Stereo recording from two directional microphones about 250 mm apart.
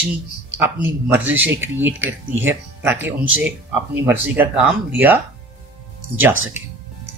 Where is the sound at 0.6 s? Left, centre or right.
Centre.